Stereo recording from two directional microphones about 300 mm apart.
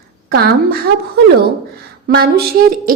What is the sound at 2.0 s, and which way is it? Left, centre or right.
Speech, right.